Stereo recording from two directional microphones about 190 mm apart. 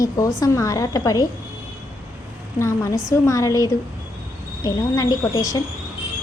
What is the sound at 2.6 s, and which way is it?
A woman's voice, 15° left (ahead or behind).